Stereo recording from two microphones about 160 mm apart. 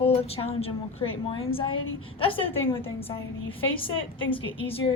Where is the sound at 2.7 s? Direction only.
15° left (ahead or behind).